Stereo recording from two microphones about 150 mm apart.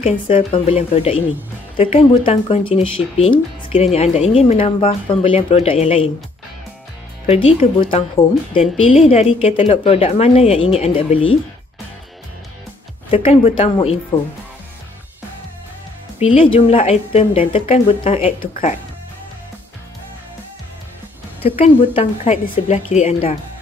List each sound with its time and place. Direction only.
0.3 s a woman's voice: 40° left (ahead or behind)
7.2 s a woman's voice: 40° left (ahead or behind)
13.1 s a woman's voice: 40° left (ahead or behind)
16.2 s a woman's voice: 40° left (ahead or behind)
21.4 s a woman's voice: 40° left (ahead or behind)